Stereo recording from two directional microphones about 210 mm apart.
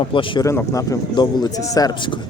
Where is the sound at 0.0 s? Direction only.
25° left (ahead or behind).